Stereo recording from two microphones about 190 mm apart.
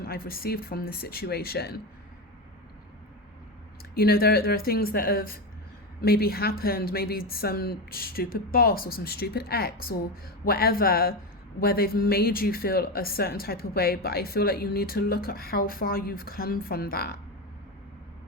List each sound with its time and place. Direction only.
0.0 s speech: 50° left (ahead or behind)
3.9 s speech: 55° left (ahead or behind)